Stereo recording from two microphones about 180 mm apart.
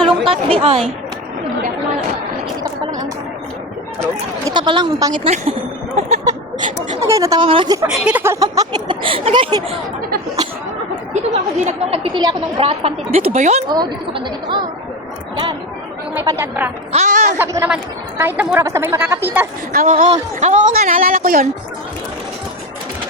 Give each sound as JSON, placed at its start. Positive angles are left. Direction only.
{"t": 0.3, "sound": "a woman's voice", "side_deg": -30}
{"t": 4.0, "sound": "speech", "side_deg": -20}
{"t": 5.2, "sound": "a woman's voice", "side_deg": -35}
{"t": 7.1, "sound": "speech", "side_deg": -20}
{"t": 7.9, "sound": "speech", "side_deg": -5}
{"t": 11.1, "sound": "a woman's voice", "side_deg": -35}
{"t": 13.7, "sound": "speech", "side_deg": -25}
{"t": 16.1, "sound": "speech", "side_deg": -15}
{"t": 16.9, "sound": "speech", "side_deg": -40}
{"t": 17.3, "sound": "speech", "side_deg": -15}
{"t": 19.7, "sound": "speech", "side_deg": -50}